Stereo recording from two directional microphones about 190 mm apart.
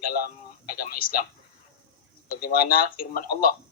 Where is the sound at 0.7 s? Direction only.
50° left (ahead or behind).